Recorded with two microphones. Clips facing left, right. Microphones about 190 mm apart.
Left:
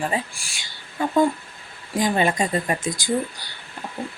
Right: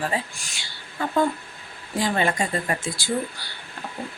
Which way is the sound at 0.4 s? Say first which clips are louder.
Right 1 dB; 10° left (ahead or behind).